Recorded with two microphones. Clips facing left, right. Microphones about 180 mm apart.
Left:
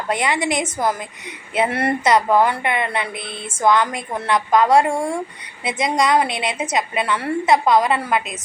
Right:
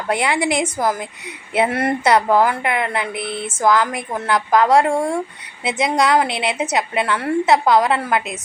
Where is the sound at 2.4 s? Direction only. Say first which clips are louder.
Right 1 dB; centre (ahead or behind).